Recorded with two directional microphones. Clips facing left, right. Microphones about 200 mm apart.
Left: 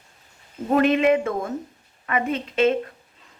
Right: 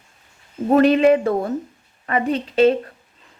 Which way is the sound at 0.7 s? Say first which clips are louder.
Right 4 dB; 35° right (ahead or behind).